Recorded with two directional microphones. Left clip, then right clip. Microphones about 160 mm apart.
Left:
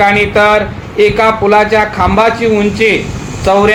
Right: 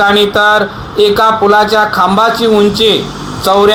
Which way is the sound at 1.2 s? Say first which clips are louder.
Right 1 dB; 35° right (ahead or behind).